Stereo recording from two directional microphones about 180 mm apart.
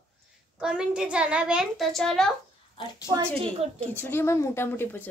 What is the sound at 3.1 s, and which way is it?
Speech, 30° right (ahead or behind).